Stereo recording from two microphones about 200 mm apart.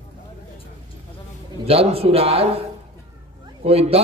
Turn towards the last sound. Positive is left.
turn(degrees=-30)  # may be behind; listen again after turning